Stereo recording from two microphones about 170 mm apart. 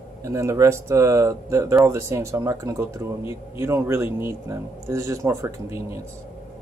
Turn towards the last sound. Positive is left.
turn(degrees=-15)  # may be behind; listen again after turning